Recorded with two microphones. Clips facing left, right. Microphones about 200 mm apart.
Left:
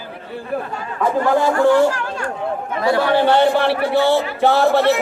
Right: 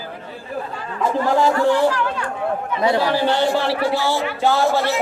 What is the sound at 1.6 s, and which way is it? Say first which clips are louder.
Speech: left 3 dB; 45° left (ahead or behind).